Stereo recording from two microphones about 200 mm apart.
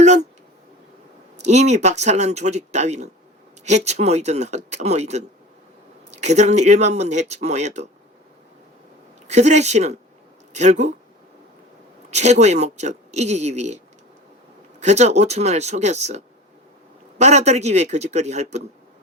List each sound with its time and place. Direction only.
0.0 s a sound: 35° right (ahead or behind)
1.4 s speech: 35° right (ahead or behind)
9.2 s speech: 35° right (ahead or behind)
12.1 s speech: 35° right (ahead or behind)